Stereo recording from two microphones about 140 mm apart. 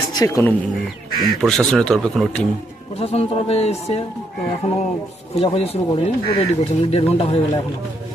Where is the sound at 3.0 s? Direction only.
45° left (ahead or behind).